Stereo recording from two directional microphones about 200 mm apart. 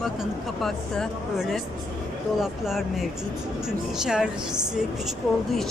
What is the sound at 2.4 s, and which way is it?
Speech, centre (ahead or behind).